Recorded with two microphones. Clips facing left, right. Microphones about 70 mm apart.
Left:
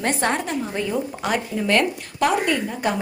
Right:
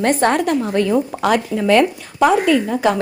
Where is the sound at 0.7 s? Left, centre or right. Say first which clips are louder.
Right 8 dB; right.